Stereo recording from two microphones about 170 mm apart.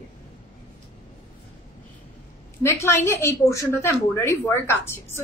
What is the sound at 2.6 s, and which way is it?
A woman's voice, 15° left (ahead or behind).